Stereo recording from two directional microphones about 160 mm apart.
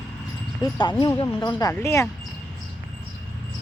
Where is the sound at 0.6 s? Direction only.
30° left (ahead or behind).